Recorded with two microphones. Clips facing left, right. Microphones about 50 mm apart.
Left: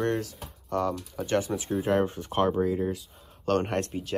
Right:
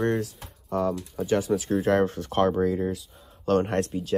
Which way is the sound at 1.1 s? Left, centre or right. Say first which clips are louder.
Right 4 dB; left.